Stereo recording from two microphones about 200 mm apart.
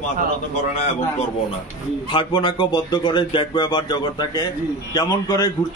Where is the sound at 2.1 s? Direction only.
25° left (ahead or behind).